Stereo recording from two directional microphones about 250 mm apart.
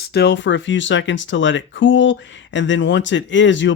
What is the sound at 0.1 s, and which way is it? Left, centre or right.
Speech, left.